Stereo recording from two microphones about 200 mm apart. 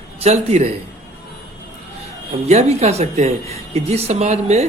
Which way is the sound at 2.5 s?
30° right (ahead or behind).